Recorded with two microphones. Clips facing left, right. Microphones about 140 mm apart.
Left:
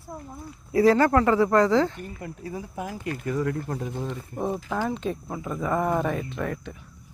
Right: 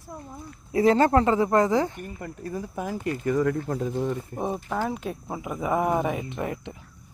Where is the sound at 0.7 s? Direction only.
25° right (ahead or behind).